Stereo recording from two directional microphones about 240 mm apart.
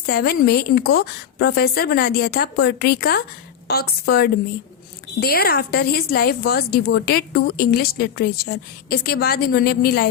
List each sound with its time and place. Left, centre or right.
0.0 s a woman's voice: left